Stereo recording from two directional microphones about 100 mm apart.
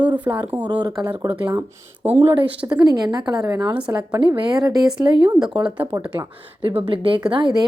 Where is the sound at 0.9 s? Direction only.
45° right (ahead or behind).